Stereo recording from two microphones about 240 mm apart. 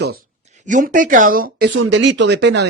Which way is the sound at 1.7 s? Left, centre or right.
Right.